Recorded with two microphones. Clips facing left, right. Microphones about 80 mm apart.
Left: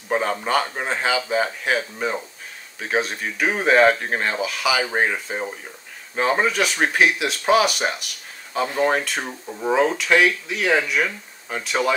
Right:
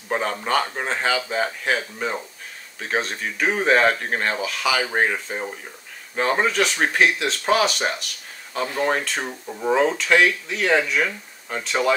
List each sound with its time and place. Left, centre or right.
0.1 s speech: centre